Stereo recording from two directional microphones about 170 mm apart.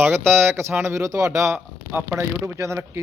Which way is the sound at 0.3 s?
15° right (ahead or behind).